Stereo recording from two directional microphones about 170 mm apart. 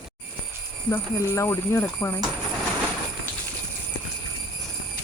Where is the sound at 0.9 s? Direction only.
15° left (ahead or behind).